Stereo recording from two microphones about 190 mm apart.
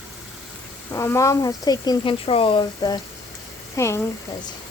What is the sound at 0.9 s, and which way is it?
Speech, 15° left (ahead or behind).